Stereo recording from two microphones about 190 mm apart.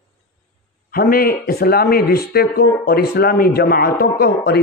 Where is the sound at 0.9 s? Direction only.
50° left (ahead or behind).